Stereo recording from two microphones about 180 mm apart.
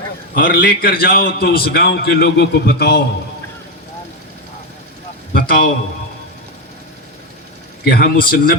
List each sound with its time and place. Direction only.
0.3 s a man's voice: 55° left (ahead or behind)
5.3 s a man's voice: 55° left (ahead or behind)
7.9 s a man's voice: 55° left (ahead or behind)